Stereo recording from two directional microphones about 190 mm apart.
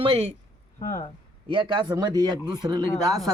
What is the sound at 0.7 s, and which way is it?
Speech, 45° left (ahead or behind).